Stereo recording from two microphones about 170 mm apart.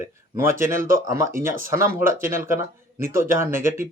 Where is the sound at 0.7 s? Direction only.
55° right (ahead or behind).